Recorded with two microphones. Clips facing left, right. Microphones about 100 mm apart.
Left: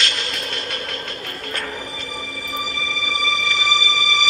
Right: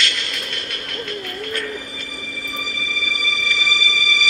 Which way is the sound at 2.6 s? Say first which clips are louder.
Left 2 dB; 25° left (ahead or behind).